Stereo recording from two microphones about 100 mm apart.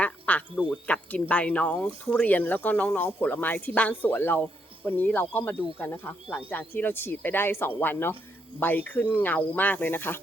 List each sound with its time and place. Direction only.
0.0 s quack: 15° left (ahead or behind)
0.6 s speech: 15° left (ahead or behind)